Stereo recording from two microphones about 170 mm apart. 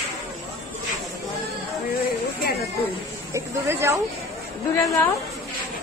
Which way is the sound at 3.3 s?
15° right (ahead or behind).